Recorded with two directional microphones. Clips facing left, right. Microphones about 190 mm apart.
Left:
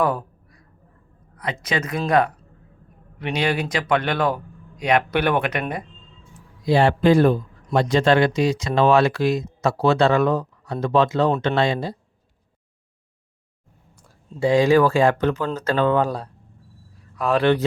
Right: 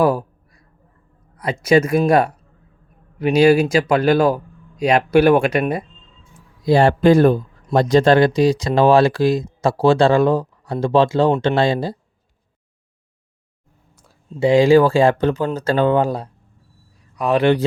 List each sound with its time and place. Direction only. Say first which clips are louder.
1.4 s speech: right 10 dB; 30° right (ahead or behind)
6.7 s a man's voice: right 4 dB; 45° right (ahead or behind)
14.3 s speech: right 4 dB; 25° right (ahead or behind)